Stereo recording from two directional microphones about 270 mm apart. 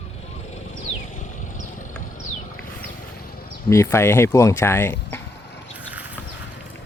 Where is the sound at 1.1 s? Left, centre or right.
Left.